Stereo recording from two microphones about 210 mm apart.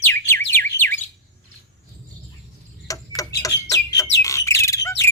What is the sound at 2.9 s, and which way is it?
Tick-tock, 15° left (ahead or behind).